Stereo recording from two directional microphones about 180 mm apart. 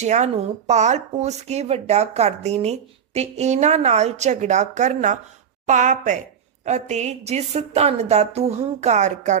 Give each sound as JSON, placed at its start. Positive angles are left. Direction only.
{"t": 0.0, "sound": "speech", "side_deg": -40}